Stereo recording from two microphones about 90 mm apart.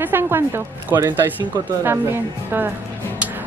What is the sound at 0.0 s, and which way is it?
Speech, 25° right (ahead or behind).